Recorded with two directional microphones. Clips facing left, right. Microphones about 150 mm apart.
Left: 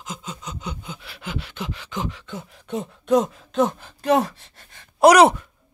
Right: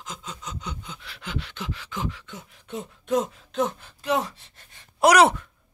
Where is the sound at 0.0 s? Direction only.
5° left (ahead or behind).